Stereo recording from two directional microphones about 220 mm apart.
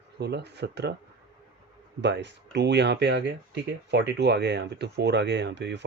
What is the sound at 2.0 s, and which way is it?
Speech, 50° right (ahead or behind).